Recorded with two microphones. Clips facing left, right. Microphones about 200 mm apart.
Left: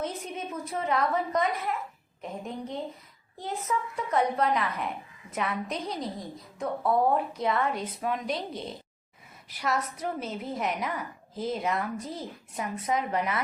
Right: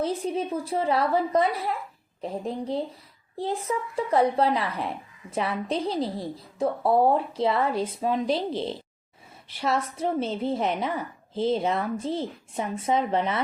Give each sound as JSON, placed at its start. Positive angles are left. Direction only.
{"t": 0.0, "sound": "a woman's voice", "side_deg": -30}